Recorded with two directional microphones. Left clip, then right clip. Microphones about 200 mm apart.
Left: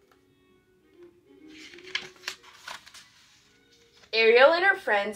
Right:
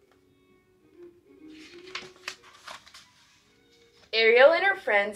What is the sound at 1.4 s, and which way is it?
Music, 15° right (ahead or behind).